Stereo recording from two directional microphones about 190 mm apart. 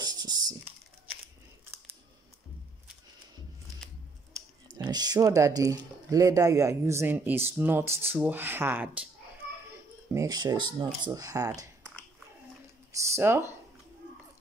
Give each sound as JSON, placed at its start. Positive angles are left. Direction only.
{"t": 0.0, "sound": "typing", "side_deg": -20}
{"t": 4.6, "sound": "speech", "side_deg": -20}
{"t": 10.1, "sound": "speech", "side_deg": -20}
{"t": 12.9, "sound": "a sound", "side_deg": -15}